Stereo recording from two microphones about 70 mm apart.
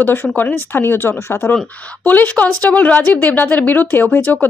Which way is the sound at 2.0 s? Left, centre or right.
Left.